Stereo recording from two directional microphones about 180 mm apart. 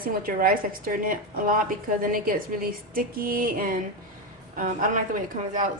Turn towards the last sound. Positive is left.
turn(degrees=-45)  # may be behind; listen again after turning